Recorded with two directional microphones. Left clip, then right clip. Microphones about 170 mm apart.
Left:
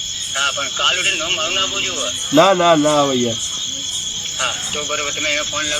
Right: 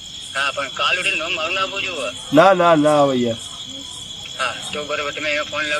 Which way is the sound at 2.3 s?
15° right (ahead or behind).